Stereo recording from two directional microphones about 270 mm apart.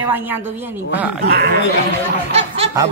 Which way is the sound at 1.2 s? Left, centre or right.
Right.